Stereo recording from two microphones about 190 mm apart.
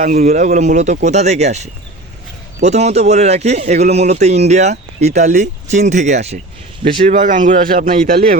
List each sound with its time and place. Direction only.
0.0 s a man's voice: 40° right (ahead or behind)